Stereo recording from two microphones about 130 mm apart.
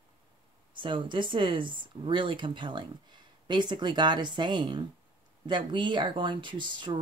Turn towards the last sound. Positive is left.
turn(degrees=-35)  # may be behind; listen again after turning